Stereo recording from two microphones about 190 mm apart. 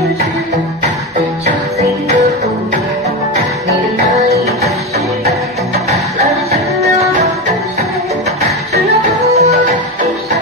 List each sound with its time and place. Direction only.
9.3 s music: 35° right (ahead or behind)